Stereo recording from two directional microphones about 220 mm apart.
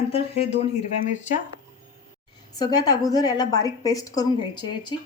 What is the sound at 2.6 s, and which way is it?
A woman's voice, 15° left (ahead or behind).